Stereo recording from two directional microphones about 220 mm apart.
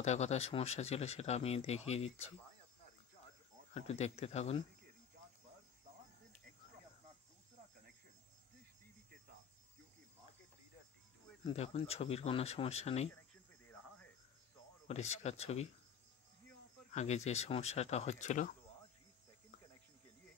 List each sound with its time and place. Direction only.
0.0 s speech: 30° left (ahead or behind)
3.7 s speech: 30° left (ahead or behind)
11.4 s speech: 30° left (ahead or behind)
13.1 s cricket: 5° left (ahead or behind)
14.9 s speech: 30° left (ahead or behind)
16.9 s speech: 30° left (ahead or behind)